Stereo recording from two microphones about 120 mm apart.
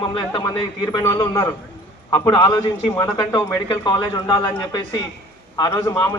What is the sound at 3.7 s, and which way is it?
A man's voice, 40° left (ahead or behind).